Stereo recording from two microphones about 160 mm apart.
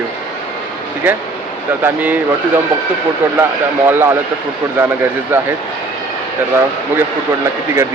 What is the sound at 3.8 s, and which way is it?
Speech, 15° right (ahead or behind).